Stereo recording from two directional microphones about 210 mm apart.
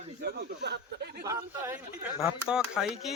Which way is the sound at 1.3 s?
10° right (ahead or behind).